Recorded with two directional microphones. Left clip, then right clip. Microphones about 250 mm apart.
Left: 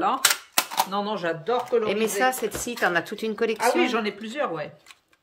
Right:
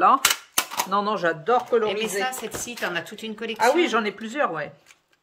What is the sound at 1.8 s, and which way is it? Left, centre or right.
A woman's voice, centre.